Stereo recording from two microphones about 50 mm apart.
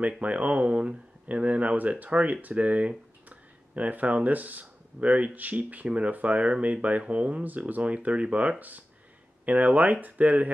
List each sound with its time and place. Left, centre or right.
0.0 s speech: right